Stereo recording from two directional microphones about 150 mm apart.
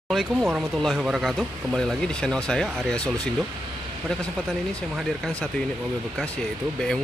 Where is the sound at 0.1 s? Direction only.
Centre (ahead or behind).